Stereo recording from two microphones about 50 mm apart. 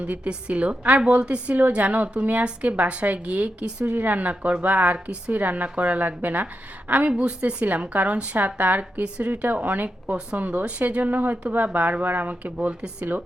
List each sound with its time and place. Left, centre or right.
0.0 s speech: right